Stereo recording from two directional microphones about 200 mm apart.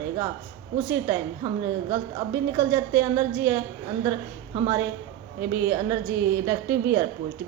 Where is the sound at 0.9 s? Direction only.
15° right (ahead or behind).